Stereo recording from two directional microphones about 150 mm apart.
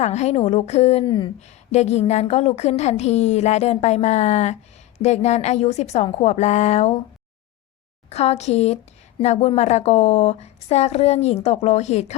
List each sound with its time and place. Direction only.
0.0 s a woman's voice: 45° left (ahead or behind)
1.0 s speech: 30° left (ahead or behind)
1.4 s a woman's voice: 45° left (ahead or behind)
8.1 s a woman's voice: 45° left (ahead or behind)